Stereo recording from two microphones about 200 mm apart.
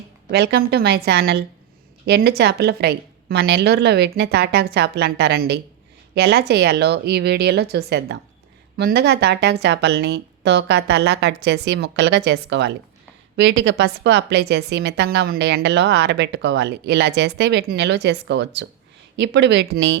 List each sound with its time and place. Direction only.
0.3 s a woman's voice: 55° right (ahead or behind)